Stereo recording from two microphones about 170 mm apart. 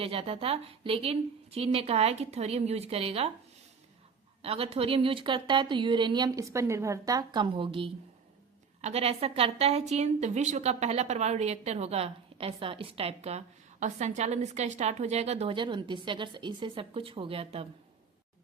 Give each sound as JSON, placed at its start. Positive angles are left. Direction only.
{"t": 0.0, "sound": "a woman's voice", "side_deg": -35}
{"t": 4.4, "sound": "a woman's voice", "side_deg": -35}